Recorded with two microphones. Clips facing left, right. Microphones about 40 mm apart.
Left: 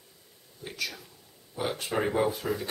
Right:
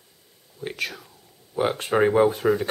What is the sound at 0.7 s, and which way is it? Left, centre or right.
Whispering, right.